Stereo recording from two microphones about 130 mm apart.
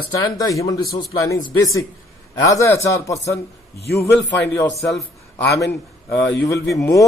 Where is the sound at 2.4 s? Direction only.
25° left (ahead or behind).